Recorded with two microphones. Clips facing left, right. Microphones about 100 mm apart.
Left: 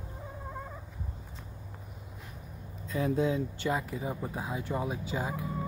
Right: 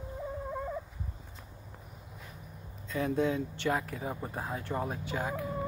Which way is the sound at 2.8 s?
5° left (ahead or behind).